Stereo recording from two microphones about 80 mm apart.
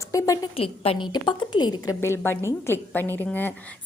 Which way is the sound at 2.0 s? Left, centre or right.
Left.